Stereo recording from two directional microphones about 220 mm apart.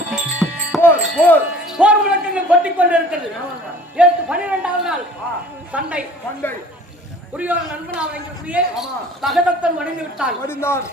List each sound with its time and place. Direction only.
0.1 s music: centre (ahead or behind)
1.3 s speech: 5° right (ahead or behind)
7.3 s a man's voice: 5° right (ahead or behind)
10.4 s speech: 10° left (ahead or behind)